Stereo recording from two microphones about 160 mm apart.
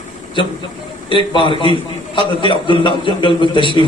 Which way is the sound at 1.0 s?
30° left (ahead or behind).